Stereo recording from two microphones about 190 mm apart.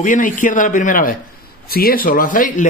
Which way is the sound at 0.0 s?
45° left (ahead or behind).